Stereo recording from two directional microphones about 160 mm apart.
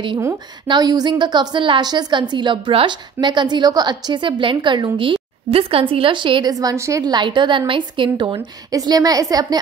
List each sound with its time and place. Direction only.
0.7 s a woman's voice: 25° right (ahead or behind)